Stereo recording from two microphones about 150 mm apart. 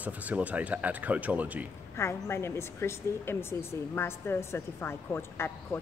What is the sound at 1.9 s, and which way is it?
A woman's voice, 15° left (ahead or behind).